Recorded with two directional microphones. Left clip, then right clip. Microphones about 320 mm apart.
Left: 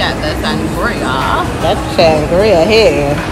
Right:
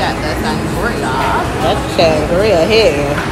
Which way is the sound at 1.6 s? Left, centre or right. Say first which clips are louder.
Left 3 dB; left.